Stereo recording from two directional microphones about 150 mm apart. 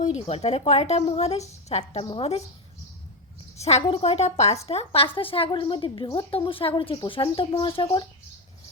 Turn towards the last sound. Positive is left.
turn(degrees=35)  # may be behind; listen again after turning